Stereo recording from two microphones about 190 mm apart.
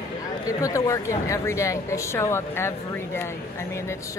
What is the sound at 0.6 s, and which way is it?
A woman's voice, 15° left (ahead or behind).